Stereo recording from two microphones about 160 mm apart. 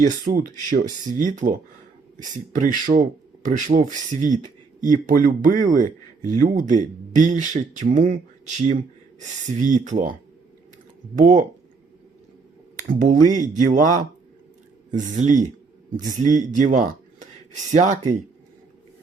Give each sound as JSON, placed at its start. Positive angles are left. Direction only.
{"t": 0.0, "sound": "speech", "side_deg": -55}
{"t": 12.9, "sound": "speech", "side_deg": -55}